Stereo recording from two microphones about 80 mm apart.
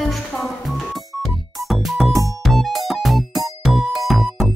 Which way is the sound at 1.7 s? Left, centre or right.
Centre.